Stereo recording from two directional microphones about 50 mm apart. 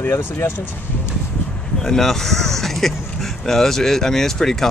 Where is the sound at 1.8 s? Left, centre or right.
Centre.